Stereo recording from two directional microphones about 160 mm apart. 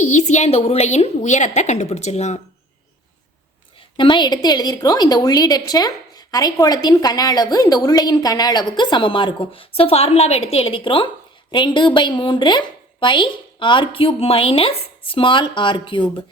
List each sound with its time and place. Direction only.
0.0 s a woman's voice: 50° left (ahead or behind)
3.9 s a woman's voice: 30° left (ahead or behind)